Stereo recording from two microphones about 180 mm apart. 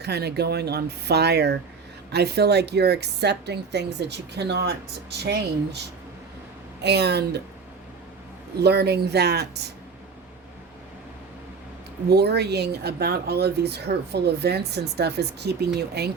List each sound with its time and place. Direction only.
0.0 s a woman's voice: 65° right (ahead or behind)
6.8 s a woman's voice: 70° right (ahead or behind)
8.5 s speech: 65° right (ahead or behind)
12.1 s a woman's voice: 65° right (ahead or behind)